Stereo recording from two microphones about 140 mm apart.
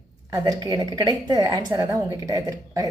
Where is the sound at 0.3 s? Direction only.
25° right (ahead or behind).